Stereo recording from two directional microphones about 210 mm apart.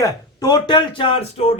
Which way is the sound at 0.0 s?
20° left (ahead or behind).